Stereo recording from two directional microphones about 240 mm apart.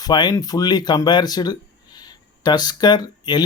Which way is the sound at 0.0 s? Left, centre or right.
Centre.